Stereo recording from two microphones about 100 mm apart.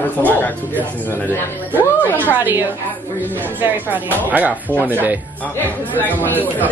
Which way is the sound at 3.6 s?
20° right (ahead or behind).